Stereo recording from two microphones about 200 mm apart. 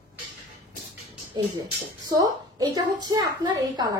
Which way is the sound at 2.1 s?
20° right (ahead or behind).